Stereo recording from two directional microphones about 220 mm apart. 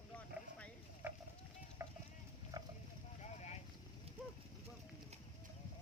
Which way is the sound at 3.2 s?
30° left (ahead or behind).